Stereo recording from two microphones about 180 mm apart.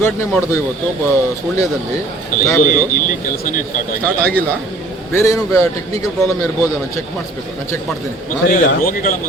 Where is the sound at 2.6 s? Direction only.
45° left (ahead or behind).